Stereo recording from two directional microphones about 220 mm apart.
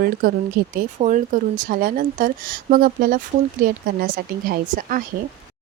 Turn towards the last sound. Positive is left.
turn(degrees=-40)  # may be behind; listen again after turning